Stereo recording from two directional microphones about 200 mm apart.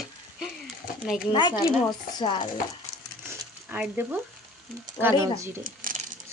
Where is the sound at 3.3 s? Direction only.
10° right (ahead or behind).